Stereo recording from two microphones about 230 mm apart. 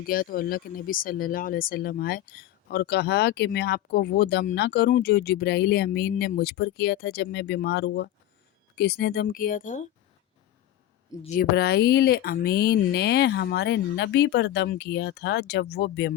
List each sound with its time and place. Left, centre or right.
0.1 s speech: left
11.3 s speech: left